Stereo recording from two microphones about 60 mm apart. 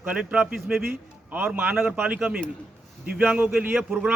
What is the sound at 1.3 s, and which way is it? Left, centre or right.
A man's voice, right.